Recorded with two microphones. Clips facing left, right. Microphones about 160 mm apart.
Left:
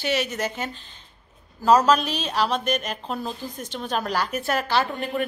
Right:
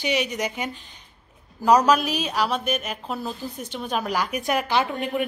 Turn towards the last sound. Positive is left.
turn(degrees=-15)  # may be behind; listen again after turning